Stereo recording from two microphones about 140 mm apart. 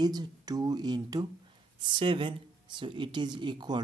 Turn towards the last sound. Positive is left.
turn(degrees=-35)  # may be behind; listen again after turning